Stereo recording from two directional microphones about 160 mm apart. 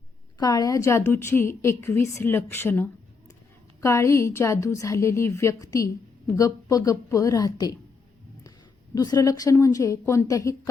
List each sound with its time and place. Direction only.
0.3 s a woman's voice: 25° left (ahead or behind)
9.0 s a woman's voice: 25° left (ahead or behind)